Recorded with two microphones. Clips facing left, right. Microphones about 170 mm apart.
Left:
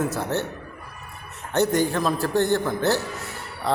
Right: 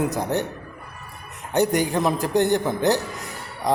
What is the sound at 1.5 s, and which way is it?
A man's voice, 15° right (ahead or behind).